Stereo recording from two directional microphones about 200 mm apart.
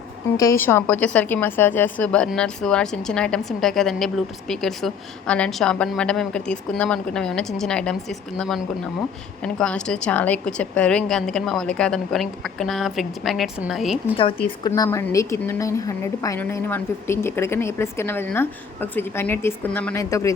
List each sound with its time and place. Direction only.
0.3 s a woman's voice: 15° left (ahead or behind); by 14.2 s centre (ahead or behind)
14.2 s speech: 25° left (ahead or behind)
14.7 s a woman's voice: 15° left (ahead or behind)